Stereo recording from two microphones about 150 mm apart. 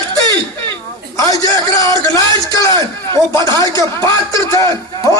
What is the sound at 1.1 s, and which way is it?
A man's voice, 25° left (ahead or behind).